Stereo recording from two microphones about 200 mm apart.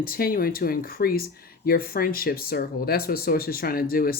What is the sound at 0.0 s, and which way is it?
Speech, 45° left (ahead or behind).